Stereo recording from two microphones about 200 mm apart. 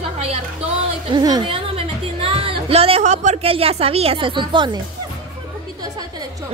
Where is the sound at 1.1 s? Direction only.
20° right (ahead or behind).